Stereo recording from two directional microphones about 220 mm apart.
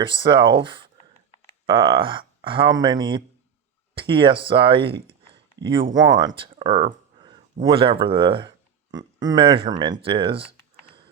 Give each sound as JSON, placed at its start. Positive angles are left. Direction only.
{"t": 0.0, "sound": "speech", "side_deg": -20}